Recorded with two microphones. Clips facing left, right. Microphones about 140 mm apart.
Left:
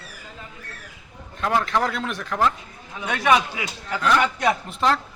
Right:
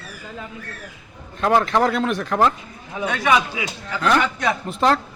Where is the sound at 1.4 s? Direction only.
55° right (ahead or behind).